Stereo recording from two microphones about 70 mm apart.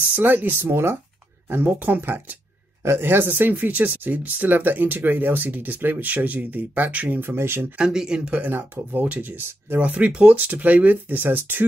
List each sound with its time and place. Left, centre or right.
0.0 s speech: right
2.8 s speech: right
7.7 s speech: centre
8.4 s speech: right
9.8 s speech: centre